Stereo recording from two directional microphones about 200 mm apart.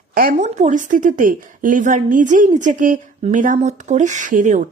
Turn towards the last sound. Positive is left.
turn(degrees=-40)  # may be behind; listen again after turning